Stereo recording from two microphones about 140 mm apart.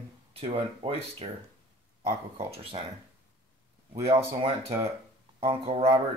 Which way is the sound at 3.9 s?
45° right (ahead or behind).